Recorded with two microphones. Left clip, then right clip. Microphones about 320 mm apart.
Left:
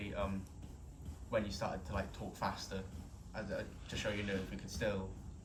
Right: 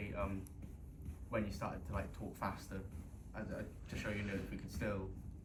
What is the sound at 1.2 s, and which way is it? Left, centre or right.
Speech, left.